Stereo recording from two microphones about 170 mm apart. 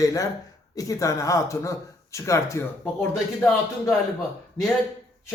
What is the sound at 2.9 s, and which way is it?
Speech, 5° left (ahead or behind).